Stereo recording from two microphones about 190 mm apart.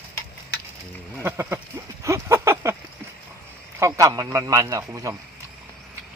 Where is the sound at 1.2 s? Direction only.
15° right (ahead or behind).